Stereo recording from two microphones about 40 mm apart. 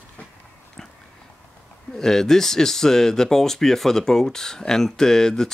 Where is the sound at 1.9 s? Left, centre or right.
Centre.